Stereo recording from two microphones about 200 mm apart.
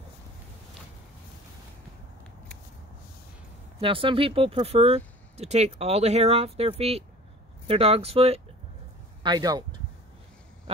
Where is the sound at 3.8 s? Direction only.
25° right (ahead or behind).